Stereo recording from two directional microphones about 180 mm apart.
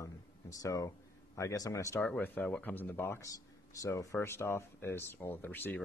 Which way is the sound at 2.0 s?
5° left (ahead or behind).